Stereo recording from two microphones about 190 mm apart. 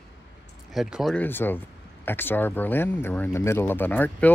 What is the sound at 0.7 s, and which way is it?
Speech, centre (ahead or behind).